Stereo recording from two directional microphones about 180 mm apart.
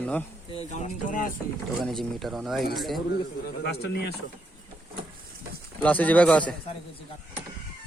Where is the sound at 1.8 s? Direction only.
Centre (ahead or behind).